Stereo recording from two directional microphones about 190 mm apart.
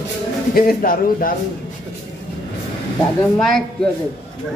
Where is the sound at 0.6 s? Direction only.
50° left (ahead or behind).